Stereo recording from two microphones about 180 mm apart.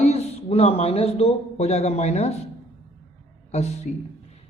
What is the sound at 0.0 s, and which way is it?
Speech, 35° left (ahead or behind).